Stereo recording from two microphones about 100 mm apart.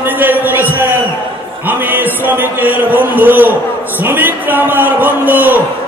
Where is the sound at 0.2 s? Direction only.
20° right (ahead or behind).